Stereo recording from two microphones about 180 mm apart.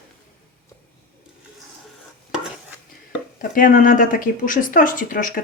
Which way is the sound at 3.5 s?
50° left (ahead or behind).